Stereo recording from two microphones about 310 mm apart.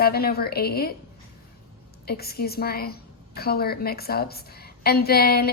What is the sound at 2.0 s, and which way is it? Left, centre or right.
A woman's voice, left.